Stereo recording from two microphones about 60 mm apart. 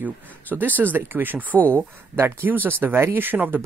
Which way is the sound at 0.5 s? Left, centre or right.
Right.